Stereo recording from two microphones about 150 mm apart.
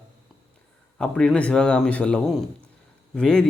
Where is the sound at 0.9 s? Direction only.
5° left (ahead or behind).